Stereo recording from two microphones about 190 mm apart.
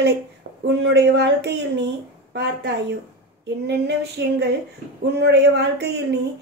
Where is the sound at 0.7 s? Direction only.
65° right (ahead or behind).